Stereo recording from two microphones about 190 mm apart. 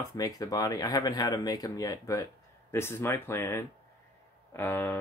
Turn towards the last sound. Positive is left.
turn(degrees=15)  # may be behind; listen again after turning